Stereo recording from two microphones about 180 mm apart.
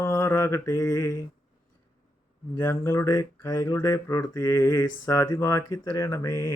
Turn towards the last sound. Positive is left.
turn(degrees=15)  # may be behind; listen again after turning